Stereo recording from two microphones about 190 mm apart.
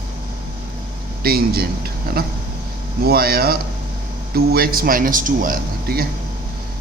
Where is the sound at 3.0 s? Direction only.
55° right (ahead or behind).